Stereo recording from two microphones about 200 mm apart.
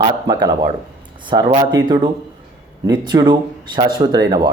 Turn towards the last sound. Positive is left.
turn(degrees=-20)  # may be behind; listen again after turning